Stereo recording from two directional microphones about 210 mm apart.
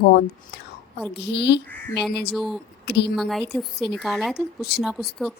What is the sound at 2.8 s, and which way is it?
Speech, 50° left (ahead or behind).